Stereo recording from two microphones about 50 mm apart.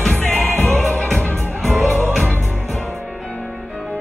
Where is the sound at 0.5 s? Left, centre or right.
Left.